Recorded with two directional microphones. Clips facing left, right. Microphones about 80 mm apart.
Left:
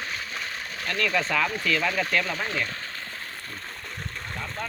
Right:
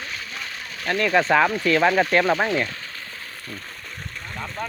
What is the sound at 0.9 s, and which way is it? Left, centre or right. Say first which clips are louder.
Speech: right 5 dB; right.